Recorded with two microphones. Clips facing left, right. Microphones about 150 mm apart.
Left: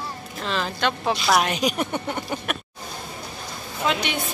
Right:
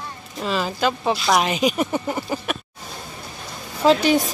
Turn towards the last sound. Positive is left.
turn(degrees=-35)  # may be behind; listen again after turning